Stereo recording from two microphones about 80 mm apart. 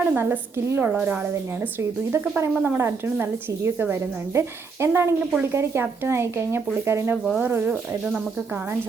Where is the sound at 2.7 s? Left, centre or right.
Right.